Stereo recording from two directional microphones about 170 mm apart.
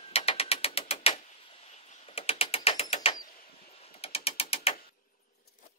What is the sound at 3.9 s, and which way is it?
Mechanisms, 35° left (ahead or behind).